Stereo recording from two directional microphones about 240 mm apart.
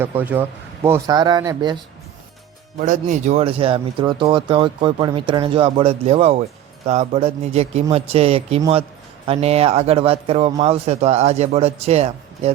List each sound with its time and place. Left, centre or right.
0.0 s speech: centre
2.7 s speech: right